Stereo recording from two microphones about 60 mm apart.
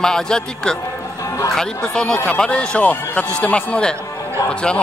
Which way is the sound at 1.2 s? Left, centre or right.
Left.